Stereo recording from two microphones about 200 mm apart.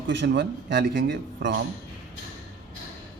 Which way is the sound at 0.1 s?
60° right (ahead or behind).